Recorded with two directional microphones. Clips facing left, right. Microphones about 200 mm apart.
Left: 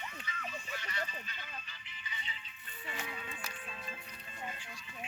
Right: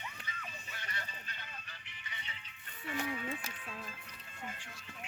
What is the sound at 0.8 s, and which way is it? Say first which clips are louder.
Music: left 2 dB; 55° right (ahead or behind).